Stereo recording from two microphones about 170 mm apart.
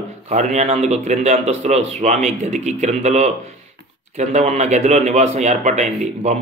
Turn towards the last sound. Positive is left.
turn(degrees=-45)  # may be behind; listen again after turning